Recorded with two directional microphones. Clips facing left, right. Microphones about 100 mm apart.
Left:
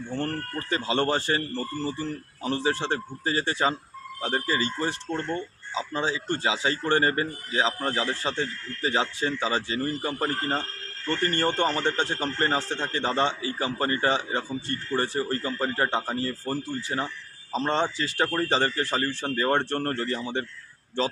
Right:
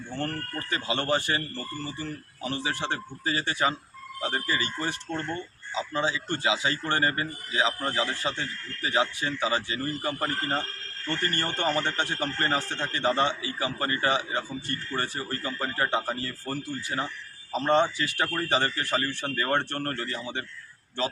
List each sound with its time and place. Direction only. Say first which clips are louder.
0.7 s speech: left 2 dB; 30° left (ahead or behind)